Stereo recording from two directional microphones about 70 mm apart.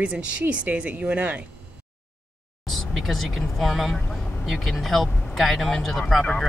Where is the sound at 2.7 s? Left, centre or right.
Centre.